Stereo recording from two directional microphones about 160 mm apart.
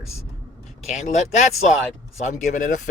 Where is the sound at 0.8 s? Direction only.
45° left (ahead or behind).